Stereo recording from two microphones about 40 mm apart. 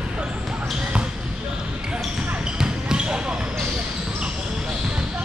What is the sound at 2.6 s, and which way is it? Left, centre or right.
Basketball bounce, centre.